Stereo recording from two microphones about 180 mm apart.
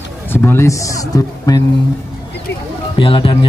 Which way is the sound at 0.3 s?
10° left (ahead or behind).